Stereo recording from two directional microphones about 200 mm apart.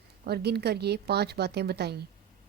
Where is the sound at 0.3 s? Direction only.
55° right (ahead or behind).